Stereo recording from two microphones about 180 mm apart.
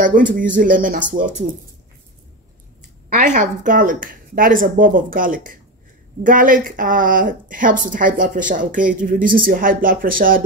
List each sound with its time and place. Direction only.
0.0 s a woman's voice: 50° right (ahead or behind)
3.1 s a woman's voice: 45° right (ahead or behind)